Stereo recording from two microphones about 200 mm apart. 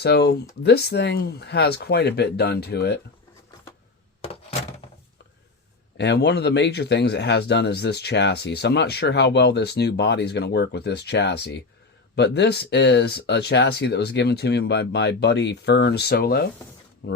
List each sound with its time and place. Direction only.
0.0 s speech: 55° left (ahead or behind)
6.0 s speech: 55° left (ahead or behind)